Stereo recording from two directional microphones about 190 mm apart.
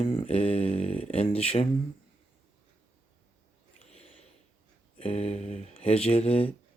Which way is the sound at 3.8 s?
35° left (ahead or behind).